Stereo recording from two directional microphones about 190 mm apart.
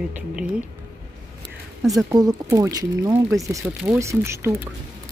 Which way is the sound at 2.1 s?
20° right (ahead or behind).